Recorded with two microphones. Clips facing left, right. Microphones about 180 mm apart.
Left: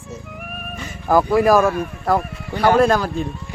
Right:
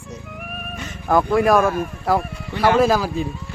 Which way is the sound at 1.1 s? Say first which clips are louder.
Left 2 dB; centre (ahead or behind).